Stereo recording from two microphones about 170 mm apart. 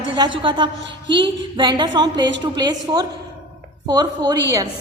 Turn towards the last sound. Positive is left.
turn(degrees=-20)  # may be behind; listen again after turning